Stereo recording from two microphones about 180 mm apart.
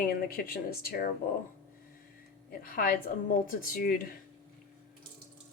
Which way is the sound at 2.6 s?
55° left (ahead or behind).